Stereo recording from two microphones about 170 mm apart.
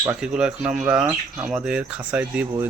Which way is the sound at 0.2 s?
5° right (ahead or behind).